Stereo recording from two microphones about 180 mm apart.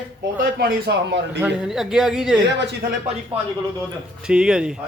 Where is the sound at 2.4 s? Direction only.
75° right (ahead or behind).